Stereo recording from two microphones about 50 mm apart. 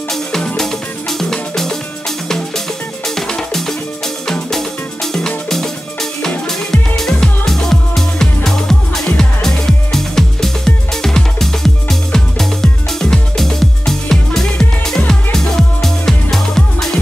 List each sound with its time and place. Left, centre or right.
0.6 s music: centre
3.2 s music: centre
7.1 s music: centre